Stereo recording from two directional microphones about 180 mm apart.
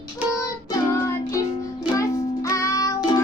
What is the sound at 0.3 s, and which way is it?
Music, 15° left (ahead or behind).